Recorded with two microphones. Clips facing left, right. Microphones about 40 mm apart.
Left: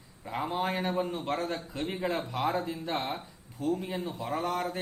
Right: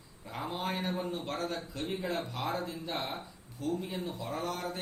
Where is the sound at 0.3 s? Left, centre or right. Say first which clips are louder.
Left 5 dB; left.